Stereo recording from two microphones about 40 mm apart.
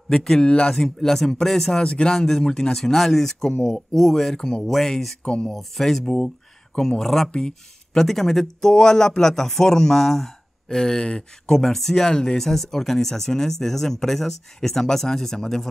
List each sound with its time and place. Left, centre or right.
0.1 s speech: centre
0.5 s speech: left
0.7 s speech: centre
1.8 s speech: left; by 5.1 s centre
5.2 s speech: centre
5.5 s speech: centre
11.5 s speech: centre